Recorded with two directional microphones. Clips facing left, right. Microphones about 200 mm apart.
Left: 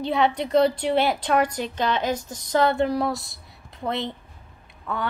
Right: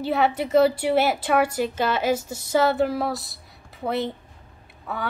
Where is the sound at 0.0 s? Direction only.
5° right (ahead or behind).